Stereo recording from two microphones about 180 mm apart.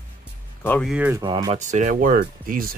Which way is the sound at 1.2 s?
25° right (ahead or behind).